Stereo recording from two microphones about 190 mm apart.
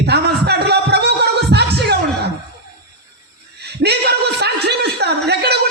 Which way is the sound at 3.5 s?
60° right (ahead or behind).